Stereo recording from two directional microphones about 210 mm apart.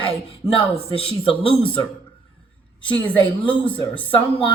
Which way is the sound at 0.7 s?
25° left (ahead or behind).